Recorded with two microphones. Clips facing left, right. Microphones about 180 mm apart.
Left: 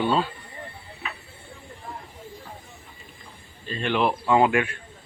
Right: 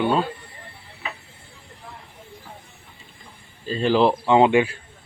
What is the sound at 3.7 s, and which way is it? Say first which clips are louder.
Speech: right 6 dB; 35° right (ahead or behind).